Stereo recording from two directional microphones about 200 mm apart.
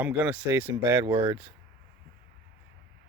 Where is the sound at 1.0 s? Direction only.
20° right (ahead or behind).